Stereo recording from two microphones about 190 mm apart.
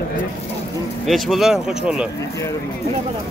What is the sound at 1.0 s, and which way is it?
Speech, centre (ahead or behind).